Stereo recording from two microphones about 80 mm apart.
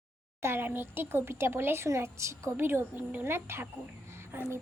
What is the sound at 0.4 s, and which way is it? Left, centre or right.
Speech, right.